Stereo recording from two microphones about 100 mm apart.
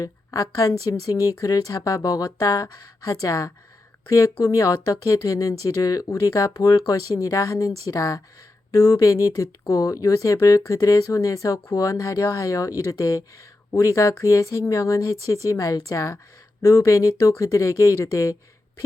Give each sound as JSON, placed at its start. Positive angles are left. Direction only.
{"t": 0.0, "sound": "speech", "side_deg": 35}